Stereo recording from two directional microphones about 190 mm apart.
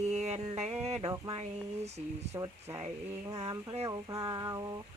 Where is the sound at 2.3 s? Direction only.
15° right (ahead or behind).